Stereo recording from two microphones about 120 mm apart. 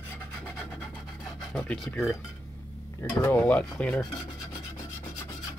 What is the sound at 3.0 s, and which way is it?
Speech, 20° left (ahead or behind).